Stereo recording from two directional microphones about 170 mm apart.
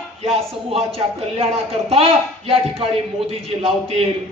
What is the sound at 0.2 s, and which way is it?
Speech, 35° right (ahead or behind).